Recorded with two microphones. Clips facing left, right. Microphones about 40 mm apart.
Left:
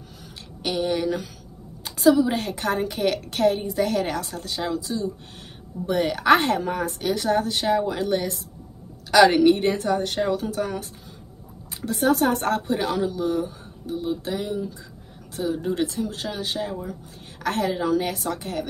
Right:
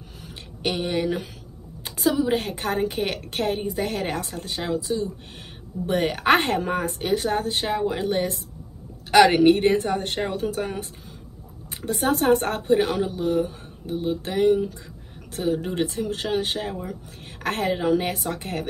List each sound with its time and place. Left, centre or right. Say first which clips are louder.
0.6 s a woman's voice: left 1 dB; right
17.7 s speech: right 1 dB; right